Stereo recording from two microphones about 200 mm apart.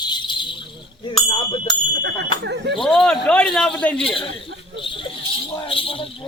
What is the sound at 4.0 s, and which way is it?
Speech, 25° left (ahead or behind).